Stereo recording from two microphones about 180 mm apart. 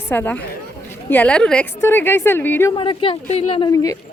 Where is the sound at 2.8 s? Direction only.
30° left (ahead or behind).